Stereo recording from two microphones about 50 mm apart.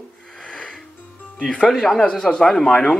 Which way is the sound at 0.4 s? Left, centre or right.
Centre.